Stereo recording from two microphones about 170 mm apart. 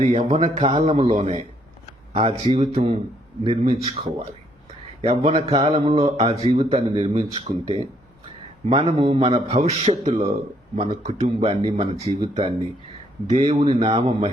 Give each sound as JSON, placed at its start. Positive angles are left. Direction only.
{"t": 0.1, "sound": "a man's voice", "side_deg": -40}
{"t": 11.3, "sound": "a man's voice", "side_deg": -35}